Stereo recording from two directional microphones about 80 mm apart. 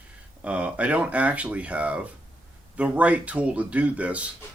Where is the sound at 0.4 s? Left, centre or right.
Centre.